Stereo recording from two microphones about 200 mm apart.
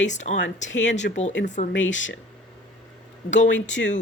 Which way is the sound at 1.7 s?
70° left (ahead or behind).